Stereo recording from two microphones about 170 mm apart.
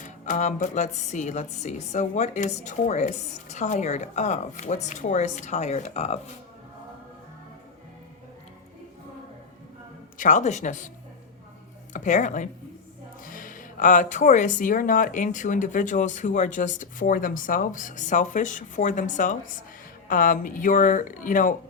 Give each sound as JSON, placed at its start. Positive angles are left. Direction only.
{"t": 0.0, "sound": "a woman's voice", "side_deg": 45}
{"t": 10.2, "sound": "a woman's voice", "side_deg": 50}
{"t": 11.9, "sound": "a woman's voice", "side_deg": 45}